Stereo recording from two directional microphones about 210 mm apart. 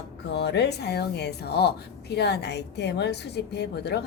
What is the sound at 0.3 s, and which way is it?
Speech, 55° left (ahead or behind).